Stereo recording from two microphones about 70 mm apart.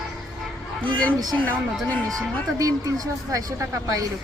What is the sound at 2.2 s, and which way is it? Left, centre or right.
A woman's voice, right.